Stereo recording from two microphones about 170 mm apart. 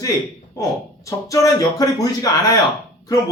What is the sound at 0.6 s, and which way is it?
Speech, 20° left (ahead or behind).